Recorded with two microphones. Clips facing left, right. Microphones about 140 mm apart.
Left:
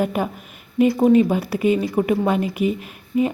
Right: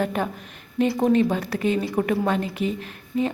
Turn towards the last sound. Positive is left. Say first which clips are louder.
# left 4 dB
turn(degrees=10)  # may be behind; listen again after turning